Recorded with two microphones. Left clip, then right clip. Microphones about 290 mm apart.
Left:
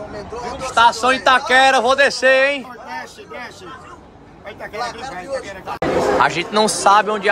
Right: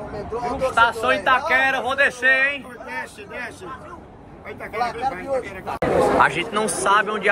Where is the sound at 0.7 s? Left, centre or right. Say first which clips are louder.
Left 6 dB; left.